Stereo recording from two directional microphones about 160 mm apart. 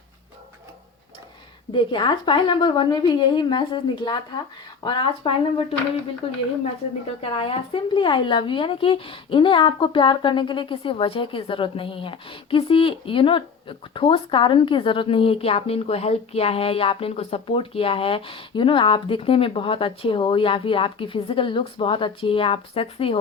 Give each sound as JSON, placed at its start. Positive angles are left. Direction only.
{"t": 1.7, "sound": "a woman's voice", "side_deg": 30}
{"t": 7.2, "sound": "a woman's voice", "side_deg": 35}